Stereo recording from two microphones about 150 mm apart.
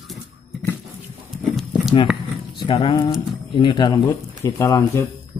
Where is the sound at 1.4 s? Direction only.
Centre (ahead or behind).